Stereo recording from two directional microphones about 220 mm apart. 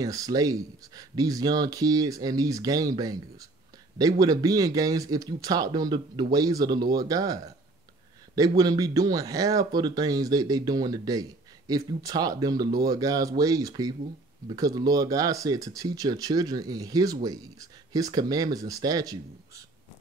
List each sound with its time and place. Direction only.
0.0 s speech: 15° right (ahead or behind)
4.2 s speech: 15° right (ahead or behind)